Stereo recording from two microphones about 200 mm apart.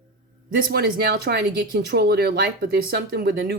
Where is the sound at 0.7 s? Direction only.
55° right (ahead or behind).